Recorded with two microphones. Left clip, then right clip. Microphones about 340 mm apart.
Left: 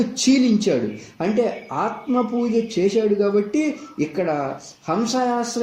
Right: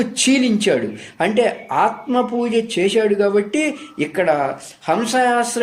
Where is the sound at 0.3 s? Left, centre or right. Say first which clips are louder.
Right 2 dB; right.